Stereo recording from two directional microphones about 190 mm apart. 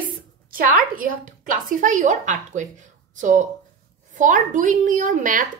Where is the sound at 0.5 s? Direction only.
45° right (ahead or behind).